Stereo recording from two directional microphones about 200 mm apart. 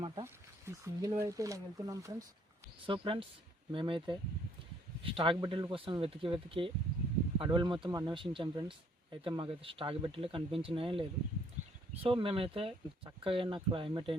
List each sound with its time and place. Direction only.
0.0 s speech: 20° right (ahead or behind)
2.8 s speech: 25° right (ahead or behind)